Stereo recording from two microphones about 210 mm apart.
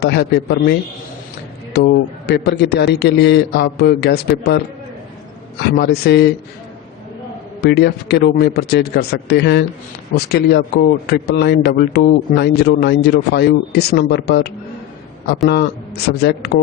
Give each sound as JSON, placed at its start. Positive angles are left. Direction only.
{"t": 0.0, "sound": "a man's voice", "side_deg": 50}
{"t": 5.7, "sound": "a man's voice", "side_deg": 50}
{"t": 7.6, "sound": "a man's voice", "side_deg": 50}
{"t": 16.1, "sound": "a man's voice", "side_deg": 50}